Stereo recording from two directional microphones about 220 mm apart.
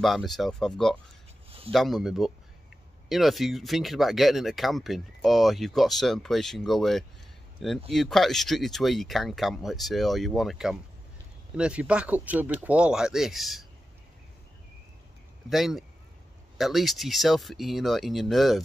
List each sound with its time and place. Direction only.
0.0 s speech: centre (ahead or behind)
15.5 s speech: centre (ahead or behind)